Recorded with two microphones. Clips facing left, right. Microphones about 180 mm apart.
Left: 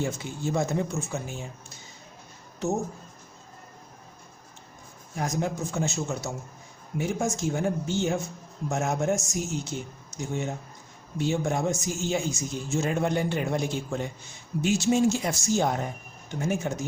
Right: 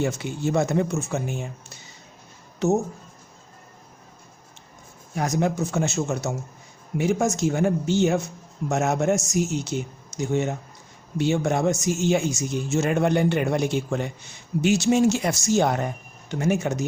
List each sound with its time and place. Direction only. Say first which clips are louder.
0.0 s speech: right 5 dB; 70° right (ahead or behind)
5.1 s speech: right 5 dB; 75° right (ahead or behind)